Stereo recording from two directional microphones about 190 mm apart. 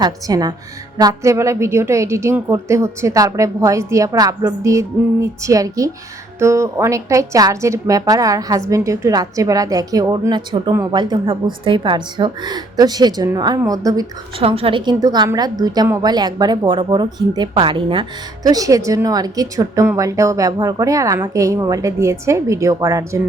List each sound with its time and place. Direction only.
0.0 s a woman's voice: 20° right (ahead or behind)
14.4 s a woman's voice: 30° right (ahead or behind)